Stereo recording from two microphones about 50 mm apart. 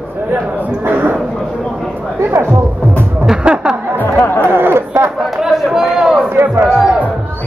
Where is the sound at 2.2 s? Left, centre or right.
Right.